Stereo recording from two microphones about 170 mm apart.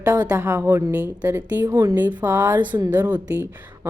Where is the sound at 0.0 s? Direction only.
20° right (ahead or behind).